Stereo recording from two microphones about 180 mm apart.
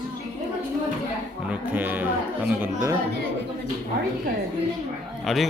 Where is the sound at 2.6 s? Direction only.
15° right (ahead or behind).